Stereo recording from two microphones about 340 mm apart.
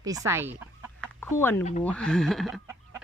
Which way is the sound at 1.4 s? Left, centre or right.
Centre.